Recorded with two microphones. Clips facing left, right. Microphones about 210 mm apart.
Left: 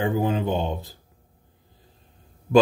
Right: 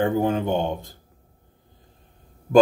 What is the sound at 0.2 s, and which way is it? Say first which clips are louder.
Speech: right 2 dB; 50° right (ahead or behind).